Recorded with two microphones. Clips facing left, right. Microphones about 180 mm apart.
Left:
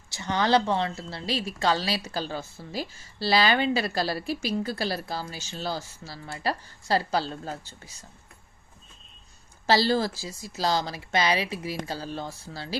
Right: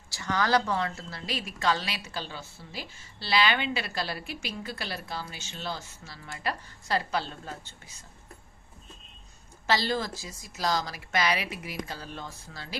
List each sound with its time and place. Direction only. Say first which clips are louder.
0.1 s a woman's voice: left 3 dB; 25° left (ahead or behind)
9.6 s a woman's voice: left 5 dB; 35° left (ahead or behind)